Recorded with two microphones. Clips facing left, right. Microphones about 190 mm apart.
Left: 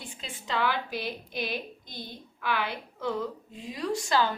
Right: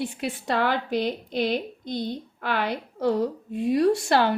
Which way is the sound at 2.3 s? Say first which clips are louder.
Right 3 dB; 60° right (ahead or behind).